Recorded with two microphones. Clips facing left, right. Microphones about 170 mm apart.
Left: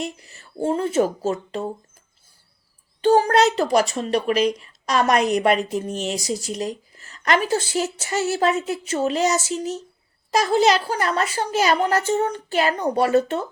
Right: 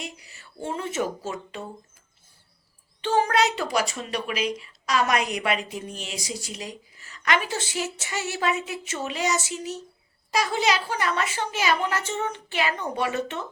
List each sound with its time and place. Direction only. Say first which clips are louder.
0.0 s speech: left 8 dB; 40° left (ahead or behind)
3.0 s a woman's voice: left 6 dB; 40° left (ahead or behind)